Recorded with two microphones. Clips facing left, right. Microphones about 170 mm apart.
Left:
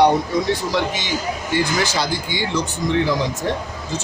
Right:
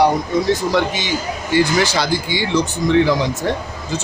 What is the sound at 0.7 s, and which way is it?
Speech, 55° right (ahead or behind).